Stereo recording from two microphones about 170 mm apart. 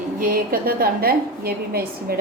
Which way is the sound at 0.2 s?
60° right (ahead or behind).